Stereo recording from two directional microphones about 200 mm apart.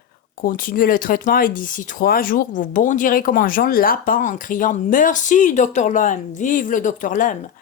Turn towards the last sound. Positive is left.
turn(degrees=40)  # may be behind; listen again after turning